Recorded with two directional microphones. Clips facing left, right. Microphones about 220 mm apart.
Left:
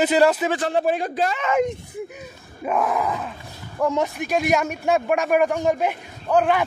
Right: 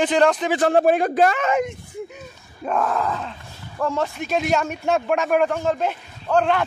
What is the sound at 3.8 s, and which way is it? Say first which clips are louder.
A man's voice: left 2 dB; 15° left (ahead or behind).